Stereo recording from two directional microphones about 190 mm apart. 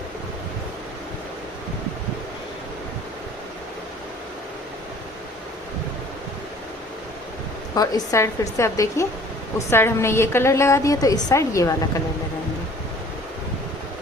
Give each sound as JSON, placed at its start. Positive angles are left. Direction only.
{"t": 7.8, "sound": "a woman's voice", "side_deg": 15}